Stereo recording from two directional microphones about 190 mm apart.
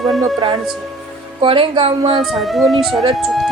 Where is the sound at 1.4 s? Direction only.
25° right (ahead or behind).